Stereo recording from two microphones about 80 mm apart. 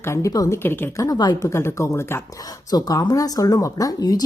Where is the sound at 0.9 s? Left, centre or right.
Left.